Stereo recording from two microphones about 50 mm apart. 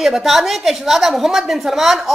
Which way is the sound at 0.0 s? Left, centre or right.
Centre.